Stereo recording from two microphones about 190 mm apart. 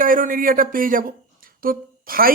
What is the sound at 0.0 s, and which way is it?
Speech, 45° right (ahead or behind).